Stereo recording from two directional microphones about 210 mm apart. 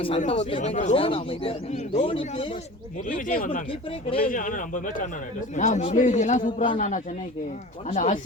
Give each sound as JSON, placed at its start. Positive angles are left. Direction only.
{"t": 0.2, "sound": "a man's voice", "side_deg": 30}
{"t": 3.2, "sound": "a man's voice", "side_deg": 40}